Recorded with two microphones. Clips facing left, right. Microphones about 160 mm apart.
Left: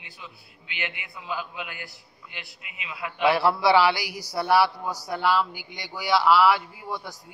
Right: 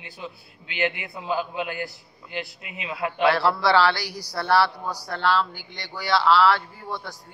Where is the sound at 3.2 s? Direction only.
15° left (ahead or behind).